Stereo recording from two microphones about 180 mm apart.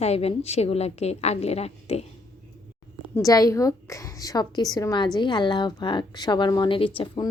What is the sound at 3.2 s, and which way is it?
A woman's voice, 20° left (ahead or behind).